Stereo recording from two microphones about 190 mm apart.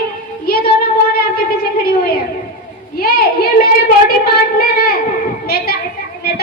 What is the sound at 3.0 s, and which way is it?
Child singing, 55° left (ahead or behind).